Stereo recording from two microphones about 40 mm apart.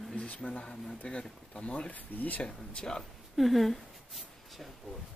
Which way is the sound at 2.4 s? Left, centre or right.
Left.